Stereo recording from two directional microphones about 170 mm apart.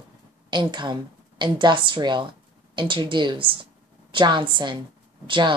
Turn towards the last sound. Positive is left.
turn(degrees=-30)  # may be behind; listen again after turning